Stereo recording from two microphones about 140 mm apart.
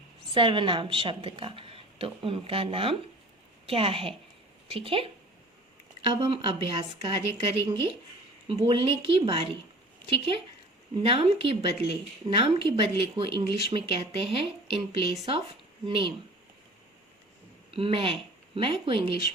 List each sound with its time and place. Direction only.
0.3 s speech: 40° right (ahead or behind)
17.7 s speech: 40° right (ahead or behind)